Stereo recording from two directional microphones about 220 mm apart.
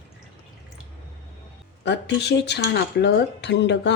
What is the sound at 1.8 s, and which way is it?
Speech, 50° left (ahead or behind).